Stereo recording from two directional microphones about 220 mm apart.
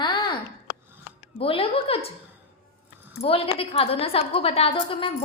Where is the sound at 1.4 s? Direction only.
25° left (ahead or behind).